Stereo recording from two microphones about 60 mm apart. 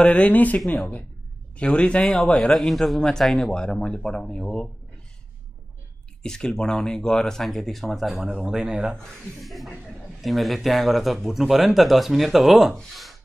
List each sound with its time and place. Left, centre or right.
0.0 s speech: left
0.6 s speech: centre
1.6 s speech: centre
2.5 s speech: centre
6.2 s speech: centre
8.6 s speech: centre
9.4 s speech: centre
12.9 s a sound: centre